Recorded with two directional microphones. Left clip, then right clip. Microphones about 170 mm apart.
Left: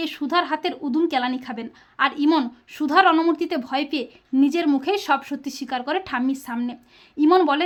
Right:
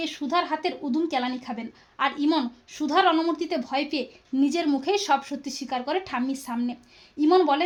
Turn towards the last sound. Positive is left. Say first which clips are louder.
# left 3 dB
turn(degrees=20)  # may be behind; listen again after turning